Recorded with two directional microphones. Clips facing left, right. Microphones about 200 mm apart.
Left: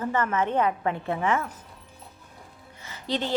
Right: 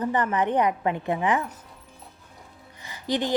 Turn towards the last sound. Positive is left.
turn(degrees=-15)  # may be behind; listen again after turning